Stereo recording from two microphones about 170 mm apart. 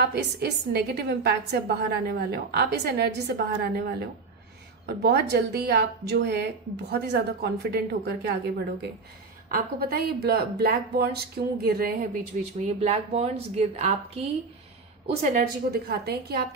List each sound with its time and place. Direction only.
0.0 s a woman's voice: 70° right (ahead or behind)
9.5 s a woman's voice: 65° right (ahead or behind)
12.6 s a woman's voice: 35° right (ahead or behind)
15.3 s a woman's voice: 65° right (ahead or behind)